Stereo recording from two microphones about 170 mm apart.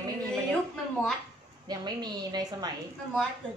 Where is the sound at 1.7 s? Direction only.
25° right (ahead or behind).